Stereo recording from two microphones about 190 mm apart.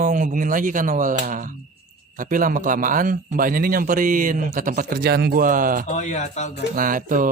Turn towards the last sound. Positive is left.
turn(degrees=-45)  # may be behind; listen again after turning